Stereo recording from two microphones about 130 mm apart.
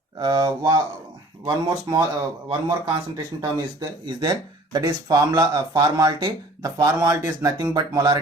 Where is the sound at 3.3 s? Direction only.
35° right (ahead or behind).